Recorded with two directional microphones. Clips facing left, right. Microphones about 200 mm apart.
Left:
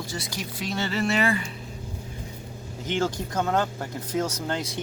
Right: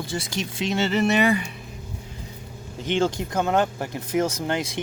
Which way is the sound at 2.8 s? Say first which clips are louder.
Right 4 dB; 20° right (ahead or behind).